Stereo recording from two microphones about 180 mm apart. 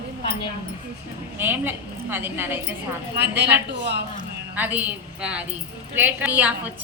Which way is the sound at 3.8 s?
70° right (ahead or behind).